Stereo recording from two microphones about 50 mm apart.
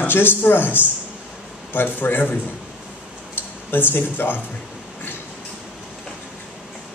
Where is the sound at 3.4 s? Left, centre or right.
Left.